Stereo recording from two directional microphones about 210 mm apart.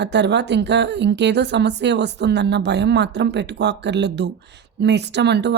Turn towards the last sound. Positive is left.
turn(degrees=-55)  # may be behind; listen again after turning